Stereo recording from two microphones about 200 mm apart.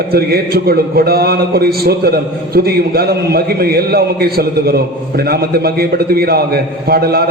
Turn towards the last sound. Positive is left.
turn(degrees=-50)  # may be behind; listen again after turning